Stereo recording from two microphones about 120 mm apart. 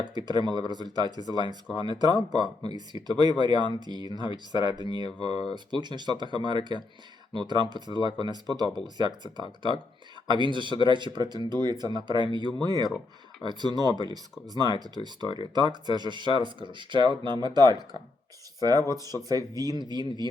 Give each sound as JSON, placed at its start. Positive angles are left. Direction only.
{"t": 0.0, "sound": "speech", "side_deg": -35}